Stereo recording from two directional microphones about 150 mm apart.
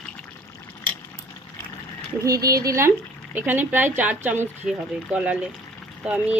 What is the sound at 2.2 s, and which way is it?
Speech, 25° right (ahead or behind).